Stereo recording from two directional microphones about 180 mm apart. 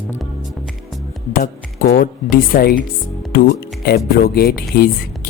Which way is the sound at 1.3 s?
50° left (ahead or behind).